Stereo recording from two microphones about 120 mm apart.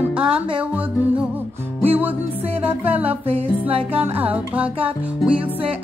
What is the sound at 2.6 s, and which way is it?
Music, 15° right (ahead or behind).